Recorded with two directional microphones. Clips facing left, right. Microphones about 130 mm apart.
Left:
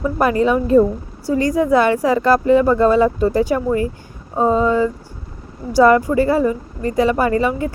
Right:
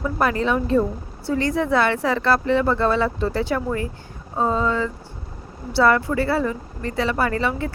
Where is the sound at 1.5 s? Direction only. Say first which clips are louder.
Left 6 dB; 15° left (ahead or behind).